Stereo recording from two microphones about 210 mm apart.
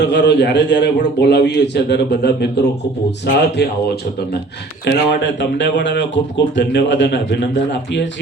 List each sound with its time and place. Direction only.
0.0 s speech: 55° left (ahead or behind)